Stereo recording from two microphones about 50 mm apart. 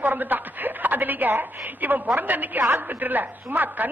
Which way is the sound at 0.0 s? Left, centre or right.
Right.